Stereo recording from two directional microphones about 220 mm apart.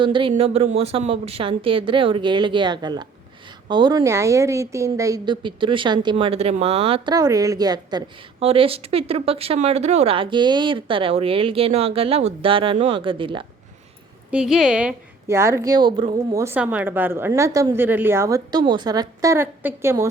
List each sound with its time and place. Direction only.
0.0 s a woman's voice: 20° right (ahead or behind)
14.3 s a woman's voice: 5° right (ahead or behind)